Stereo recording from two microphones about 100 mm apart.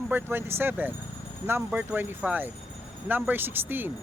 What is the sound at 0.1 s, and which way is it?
Speech, 20° right (ahead or behind).